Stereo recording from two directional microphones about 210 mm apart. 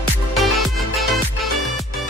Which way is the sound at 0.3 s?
Centre (ahead or behind).